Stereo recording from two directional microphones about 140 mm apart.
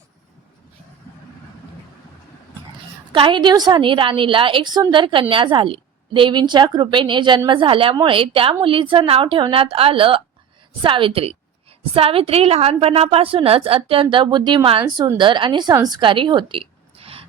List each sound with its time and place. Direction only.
3.1 s a woman's voice: 35° right (ahead or behind)